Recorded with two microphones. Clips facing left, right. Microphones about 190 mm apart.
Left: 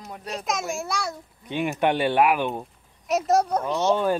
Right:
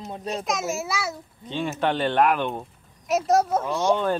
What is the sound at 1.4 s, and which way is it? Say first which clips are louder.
Speech: left 2 dB; 15° left (ahead or behind).